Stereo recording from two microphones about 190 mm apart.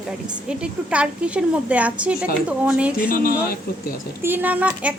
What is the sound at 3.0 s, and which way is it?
Speech, 50° left (ahead or behind).